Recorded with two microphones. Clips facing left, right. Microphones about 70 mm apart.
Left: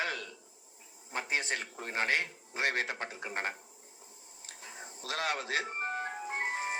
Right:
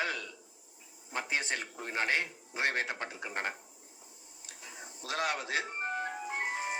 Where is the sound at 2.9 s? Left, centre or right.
Left.